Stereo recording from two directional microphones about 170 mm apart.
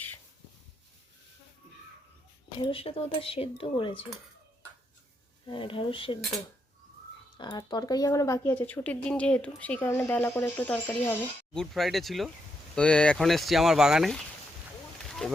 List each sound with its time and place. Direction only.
2.6 s speech: 30° left (ahead or behind)
5.5 s speech: 30° left (ahead or behind)
7.3 s speech: 25° left (ahead or behind)
11.6 s speech: centre (ahead or behind)
15.0 s wild animals: centre (ahead or behind)